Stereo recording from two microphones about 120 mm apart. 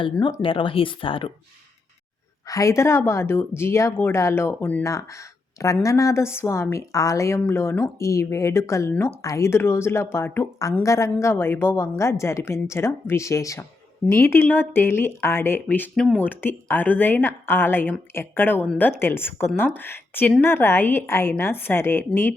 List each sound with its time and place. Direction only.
0.4 s speech: 45° left (ahead or behind)
2.5 s a woman's voice: 25° left (ahead or behind)